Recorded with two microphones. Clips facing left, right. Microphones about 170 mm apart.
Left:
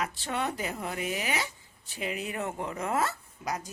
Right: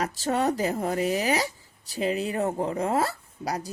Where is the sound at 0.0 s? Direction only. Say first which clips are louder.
Right 7 dB; 40° right (ahead or behind).